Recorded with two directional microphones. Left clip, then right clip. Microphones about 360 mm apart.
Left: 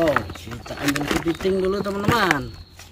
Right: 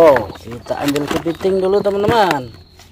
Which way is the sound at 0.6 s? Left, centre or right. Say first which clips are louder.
Right 6 dB; centre.